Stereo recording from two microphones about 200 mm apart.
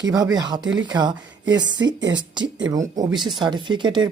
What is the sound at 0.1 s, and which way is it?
Speech, 20° right (ahead or behind).